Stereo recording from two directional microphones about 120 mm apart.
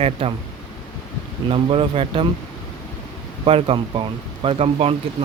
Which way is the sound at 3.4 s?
50° right (ahead or behind).